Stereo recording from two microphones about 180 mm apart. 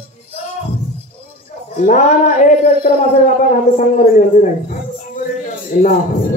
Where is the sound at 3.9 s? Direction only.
45° left (ahead or behind).